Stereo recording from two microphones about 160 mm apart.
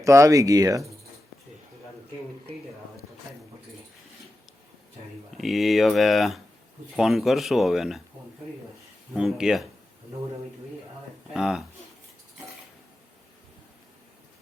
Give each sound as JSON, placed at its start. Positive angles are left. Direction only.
{"t": 0.0, "sound": "speech", "side_deg": -20}
{"t": 5.4, "sound": "speech", "side_deg": 0}
{"t": 9.1, "sound": "speech", "side_deg": -5}
{"t": 11.3, "sound": "speech", "side_deg": -5}